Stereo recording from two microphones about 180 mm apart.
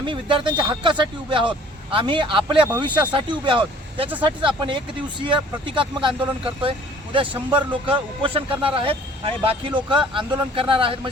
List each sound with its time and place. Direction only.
0.0 s speech: 30° right (ahead or behind)